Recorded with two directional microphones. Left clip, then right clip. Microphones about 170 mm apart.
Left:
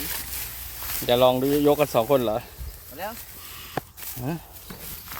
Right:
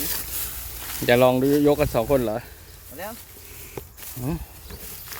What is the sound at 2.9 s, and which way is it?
Speech, 15° left (ahead or behind).